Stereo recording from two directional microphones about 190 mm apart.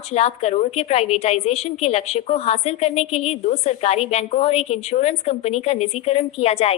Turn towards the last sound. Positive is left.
turn(degrees=30)  # may be behind; listen again after turning